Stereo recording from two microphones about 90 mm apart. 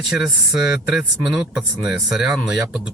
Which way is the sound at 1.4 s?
10° right (ahead or behind).